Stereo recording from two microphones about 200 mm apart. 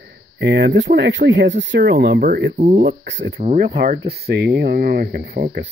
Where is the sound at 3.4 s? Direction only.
40° right (ahead or behind).